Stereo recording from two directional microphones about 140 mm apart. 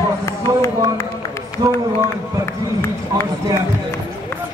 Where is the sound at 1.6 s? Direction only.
35° right (ahead or behind).